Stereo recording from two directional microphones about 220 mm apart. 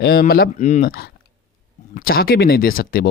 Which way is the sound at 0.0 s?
45° left (ahead or behind).